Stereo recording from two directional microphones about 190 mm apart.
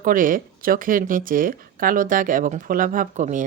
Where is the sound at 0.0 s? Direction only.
45° right (ahead or behind).